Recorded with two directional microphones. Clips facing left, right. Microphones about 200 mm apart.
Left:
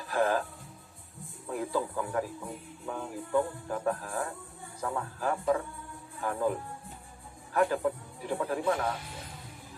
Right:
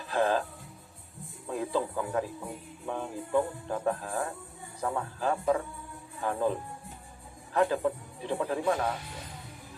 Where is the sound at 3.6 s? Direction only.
25° right (ahead or behind).